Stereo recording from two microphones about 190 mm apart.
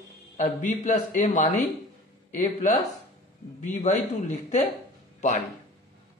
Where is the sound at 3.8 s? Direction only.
40° left (ahead or behind).